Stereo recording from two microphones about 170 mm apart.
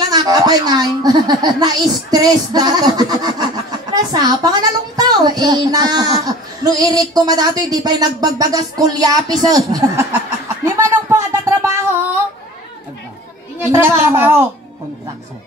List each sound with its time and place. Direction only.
0.1 s a woman's voice: 25° right (ahead or behind)
10.6 s a sound: 15° right (ahead or behind)
13.7 s a woman's voice: 15° right (ahead or behind)